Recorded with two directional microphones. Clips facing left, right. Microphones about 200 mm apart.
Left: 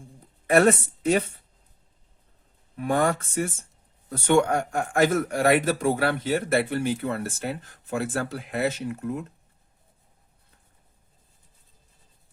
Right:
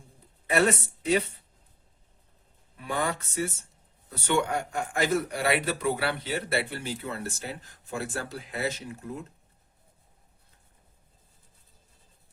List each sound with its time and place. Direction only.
0.4 s speech: 50° left (ahead or behind)
2.7 s a man's voice: 50° left (ahead or behind)